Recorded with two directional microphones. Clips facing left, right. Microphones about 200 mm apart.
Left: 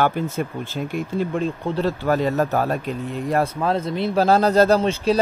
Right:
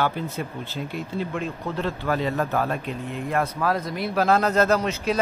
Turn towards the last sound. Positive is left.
turn(degrees=30)  # may be behind; listen again after turning